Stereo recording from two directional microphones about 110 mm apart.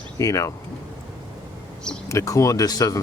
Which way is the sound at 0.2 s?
30° left (ahead or behind).